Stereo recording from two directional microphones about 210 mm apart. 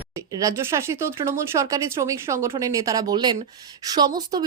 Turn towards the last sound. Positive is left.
turn(degrees=-20)  # may be behind; listen again after turning